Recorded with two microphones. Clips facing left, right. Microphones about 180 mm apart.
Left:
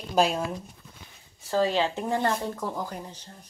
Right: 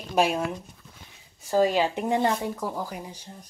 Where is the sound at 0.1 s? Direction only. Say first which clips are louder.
Even; 5° right (ahead or behind).